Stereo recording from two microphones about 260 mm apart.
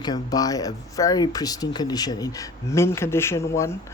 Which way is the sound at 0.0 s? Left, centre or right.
Centre.